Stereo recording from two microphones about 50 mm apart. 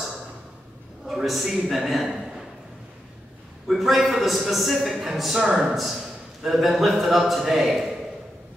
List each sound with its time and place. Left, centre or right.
1.0 s a man's voice: centre
3.6 s a man's voice: centre
5.5 s a man's voice: centre
6.4 s a man's voice: centre